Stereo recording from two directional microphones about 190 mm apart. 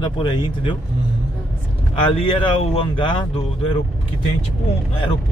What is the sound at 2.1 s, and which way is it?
Speech, 30° left (ahead or behind).